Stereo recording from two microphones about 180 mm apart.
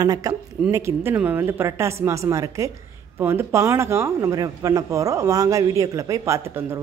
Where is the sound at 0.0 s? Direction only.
20° right (ahead or behind).